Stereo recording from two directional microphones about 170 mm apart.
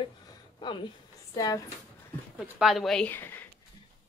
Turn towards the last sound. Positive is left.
turn(degrees=10)  # may be behind; listen again after turning